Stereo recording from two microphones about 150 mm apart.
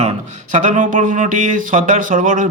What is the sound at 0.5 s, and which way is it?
A man's voice, 60° right (ahead or behind).